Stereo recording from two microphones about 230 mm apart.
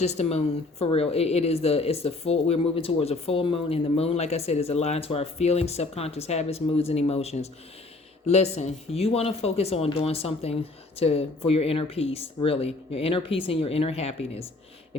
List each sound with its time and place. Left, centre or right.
0.0 s a woman's voice: left